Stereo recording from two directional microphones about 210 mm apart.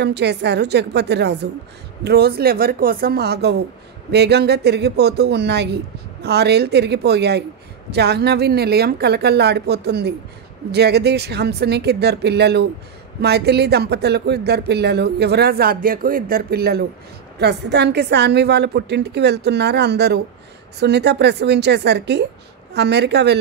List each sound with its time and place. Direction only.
0.0 s speech: 55° right (ahead or behind)